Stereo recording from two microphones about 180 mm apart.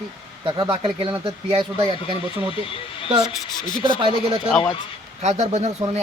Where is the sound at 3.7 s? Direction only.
25° left (ahead or behind).